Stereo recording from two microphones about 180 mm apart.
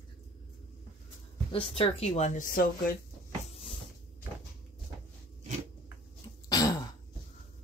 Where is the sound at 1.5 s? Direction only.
30° left (ahead or behind); by 2.9 s 50° left (ahead or behind).